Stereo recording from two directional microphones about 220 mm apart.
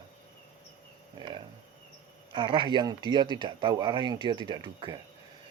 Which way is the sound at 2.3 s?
20° right (ahead or behind).